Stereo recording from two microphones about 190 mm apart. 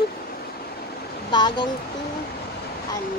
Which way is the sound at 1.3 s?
25° left (ahead or behind).